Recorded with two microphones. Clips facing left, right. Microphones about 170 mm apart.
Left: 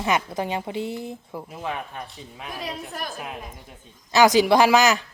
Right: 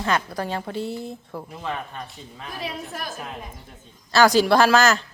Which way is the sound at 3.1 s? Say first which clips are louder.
Even; 10° left (ahead or behind).